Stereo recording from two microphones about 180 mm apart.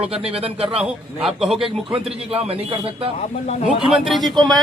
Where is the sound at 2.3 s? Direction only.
35° right (ahead or behind).